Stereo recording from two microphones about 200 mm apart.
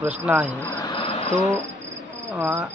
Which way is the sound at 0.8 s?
25° left (ahead or behind).